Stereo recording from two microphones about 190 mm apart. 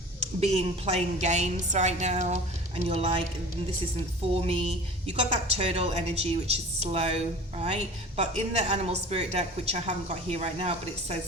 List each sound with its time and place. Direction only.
0.3 s a woman's voice: 35° right (ahead or behind)
4.4 s a woman's voice: 30° right (ahead or behind)